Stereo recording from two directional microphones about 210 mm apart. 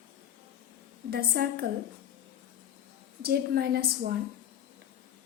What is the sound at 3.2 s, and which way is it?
Speech, 50° right (ahead or behind).